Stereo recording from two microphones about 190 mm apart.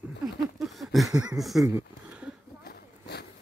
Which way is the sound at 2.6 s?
55° left (ahead or behind).